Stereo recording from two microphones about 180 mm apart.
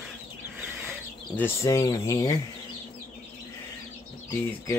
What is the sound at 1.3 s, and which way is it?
Speech, 15° left (ahead or behind).